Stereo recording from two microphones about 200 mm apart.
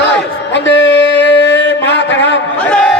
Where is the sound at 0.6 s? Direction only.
60° left (ahead or behind).